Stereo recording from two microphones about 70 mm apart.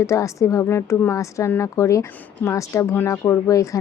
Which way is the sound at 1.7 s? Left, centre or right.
Left.